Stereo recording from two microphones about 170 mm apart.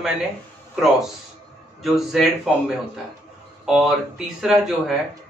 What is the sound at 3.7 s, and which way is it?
Speech, 5° right (ahead or behind).